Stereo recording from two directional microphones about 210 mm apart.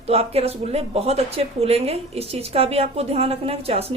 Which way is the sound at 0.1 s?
30° right (ahead or behind).